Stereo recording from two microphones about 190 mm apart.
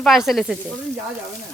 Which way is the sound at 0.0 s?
Centre (ahead or behind).